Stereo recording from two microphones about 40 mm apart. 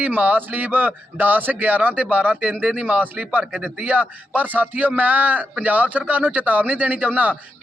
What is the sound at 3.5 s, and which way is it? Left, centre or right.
Speech, right.